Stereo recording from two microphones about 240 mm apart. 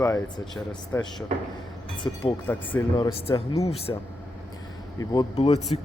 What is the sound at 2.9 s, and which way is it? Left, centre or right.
Speech, left.